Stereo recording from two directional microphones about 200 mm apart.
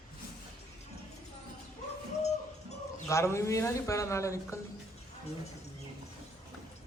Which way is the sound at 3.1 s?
15° left (ahead or behind).